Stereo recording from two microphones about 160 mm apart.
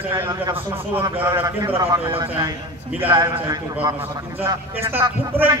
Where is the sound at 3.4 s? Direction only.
20° right (ahead or behind).